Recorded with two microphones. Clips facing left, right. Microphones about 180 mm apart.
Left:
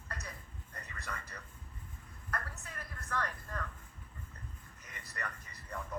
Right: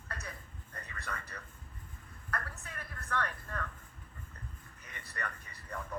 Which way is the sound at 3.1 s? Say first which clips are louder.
Right 2 dB; 30° left (ahead or behind).